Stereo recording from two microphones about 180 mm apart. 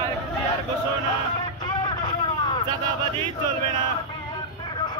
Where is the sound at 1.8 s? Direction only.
25° left (ahead or behind).